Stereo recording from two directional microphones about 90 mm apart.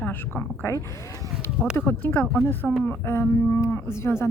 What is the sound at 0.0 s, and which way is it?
A woman's voice, 20° left (ahead or behind).